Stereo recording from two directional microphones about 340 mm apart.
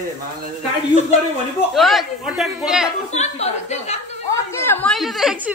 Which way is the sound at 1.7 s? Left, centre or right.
Centre.